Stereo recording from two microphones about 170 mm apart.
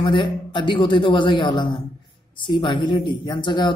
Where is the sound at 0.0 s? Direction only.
25° left (ahead or behind).